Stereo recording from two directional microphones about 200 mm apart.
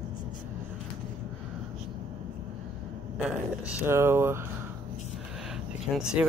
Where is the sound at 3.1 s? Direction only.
5° right (ahead or behind).